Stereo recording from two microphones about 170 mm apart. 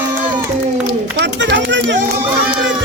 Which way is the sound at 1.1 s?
85° right.